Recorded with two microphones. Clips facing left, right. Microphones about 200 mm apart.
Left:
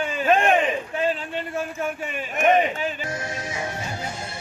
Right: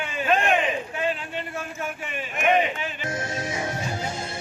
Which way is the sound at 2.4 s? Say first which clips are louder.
Left 3 dB; 40° left (ahead or behind).